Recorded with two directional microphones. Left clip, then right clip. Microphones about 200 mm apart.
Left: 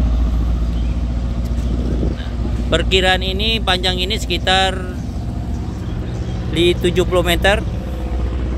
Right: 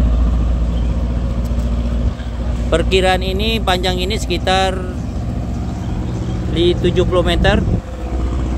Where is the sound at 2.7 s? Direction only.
5° right (ahead or behind).